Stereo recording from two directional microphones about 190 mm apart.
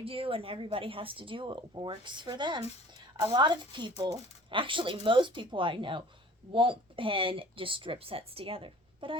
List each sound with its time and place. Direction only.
0.0 s speech: 30° right (ahead or behind)